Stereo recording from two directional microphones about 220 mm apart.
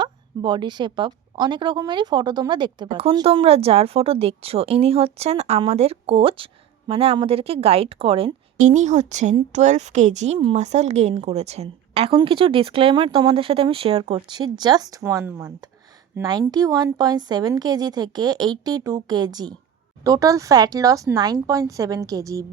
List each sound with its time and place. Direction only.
0.0 s a woman's voice: 20° right (ahead or behind)